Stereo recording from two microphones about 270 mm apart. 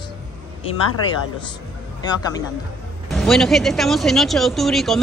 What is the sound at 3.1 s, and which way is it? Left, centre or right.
Speech, centre.